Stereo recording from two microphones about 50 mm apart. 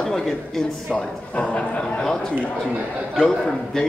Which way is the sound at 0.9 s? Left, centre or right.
Left.